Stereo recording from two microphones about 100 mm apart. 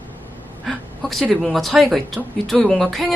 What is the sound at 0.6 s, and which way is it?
A woman's voice, centre (ahead or behind).